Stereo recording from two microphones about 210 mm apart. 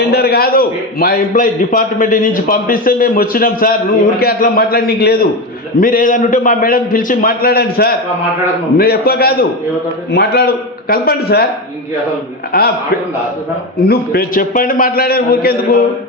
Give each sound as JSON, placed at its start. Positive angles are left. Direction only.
{"t": 0.1, "sound": "a man's voice", "side_deg": 50}
{"t": 12.5, "sound": "a man's voice", "side_deg": 45}
{"t": 13.7, "sound": "a man's voice", "side_deg": 50}